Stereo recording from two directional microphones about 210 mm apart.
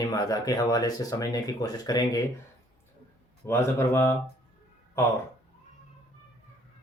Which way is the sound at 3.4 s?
10° left (ahead or behind).